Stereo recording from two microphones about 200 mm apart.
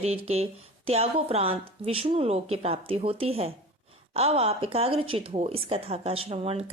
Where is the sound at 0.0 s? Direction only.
30° right (ahead or behind).